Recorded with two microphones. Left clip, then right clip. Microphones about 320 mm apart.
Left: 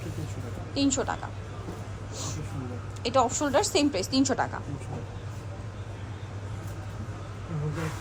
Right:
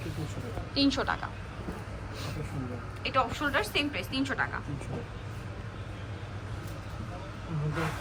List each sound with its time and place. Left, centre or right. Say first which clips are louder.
0.7 s a woman's voice: even; centre
3.0 s a woman's voice: left 4 dB; centre